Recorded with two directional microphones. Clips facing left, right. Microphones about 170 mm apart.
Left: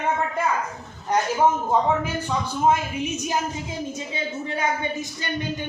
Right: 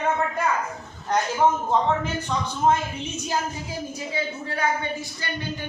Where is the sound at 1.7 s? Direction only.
10° left (ahead or behind).